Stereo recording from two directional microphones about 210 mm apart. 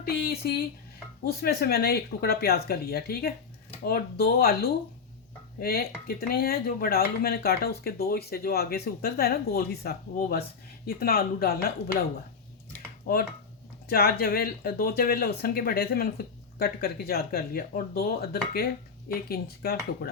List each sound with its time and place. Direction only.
0.0 s speech: 45° left (ahead or behind)
13.1 s speech: 45° left (ahead or behind)